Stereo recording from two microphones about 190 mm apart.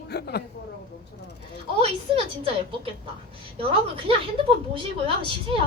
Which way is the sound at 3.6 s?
30° right (ahead or behind).